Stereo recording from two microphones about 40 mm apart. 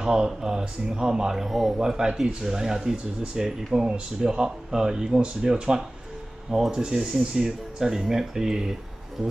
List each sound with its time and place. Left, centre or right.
0.0 s speech: centre
1.8 s speech: centre